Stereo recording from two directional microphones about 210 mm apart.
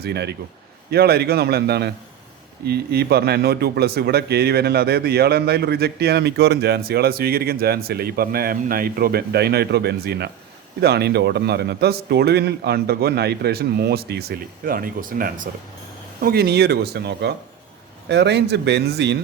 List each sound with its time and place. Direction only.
0.0 s speech: 50° right (ahead or behind)